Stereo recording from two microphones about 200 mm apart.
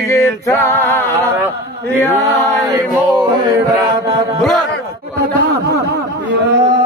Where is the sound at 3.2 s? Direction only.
20° right (ahead or behind).